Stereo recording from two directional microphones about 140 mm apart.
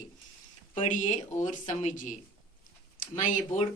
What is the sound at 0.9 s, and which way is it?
Speech, 65° left (ahead or behind).